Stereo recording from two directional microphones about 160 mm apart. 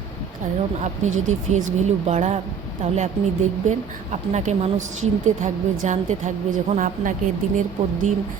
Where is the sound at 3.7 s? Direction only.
45° right (ahead or behind).